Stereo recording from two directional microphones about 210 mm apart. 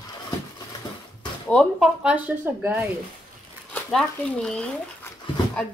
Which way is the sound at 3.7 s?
5° left (ahead or behind).